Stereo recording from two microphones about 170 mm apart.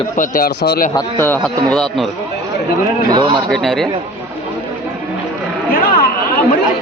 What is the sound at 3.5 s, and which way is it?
Speech, centre (ahead or behind).